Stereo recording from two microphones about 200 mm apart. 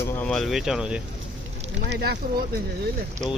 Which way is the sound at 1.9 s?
50° right (ahead or behind).